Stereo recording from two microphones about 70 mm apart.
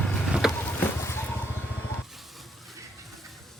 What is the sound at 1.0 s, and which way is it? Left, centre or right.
Music, left.